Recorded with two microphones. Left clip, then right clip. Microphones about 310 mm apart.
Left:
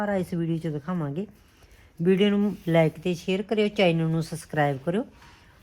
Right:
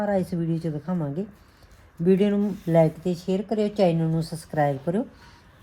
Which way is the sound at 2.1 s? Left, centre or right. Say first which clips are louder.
Right 1 dB; centre.